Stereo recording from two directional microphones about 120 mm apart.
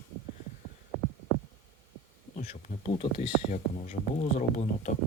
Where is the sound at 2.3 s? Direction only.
70° left (ahead or behind).